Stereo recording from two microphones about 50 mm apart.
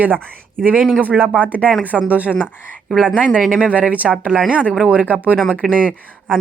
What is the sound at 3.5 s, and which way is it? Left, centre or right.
Speech, right.